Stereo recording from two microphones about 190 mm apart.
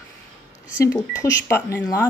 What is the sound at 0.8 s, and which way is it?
Speech, 15° left (ahead or behind).